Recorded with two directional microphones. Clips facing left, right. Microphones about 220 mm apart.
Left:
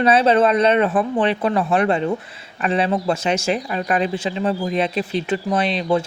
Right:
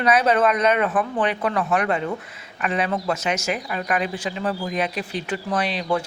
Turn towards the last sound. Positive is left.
turn(degrees=25)  # may be behind; listen again after turning